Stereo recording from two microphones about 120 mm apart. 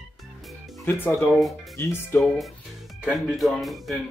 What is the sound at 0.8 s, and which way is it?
Speech, 20° left (ahead or behind).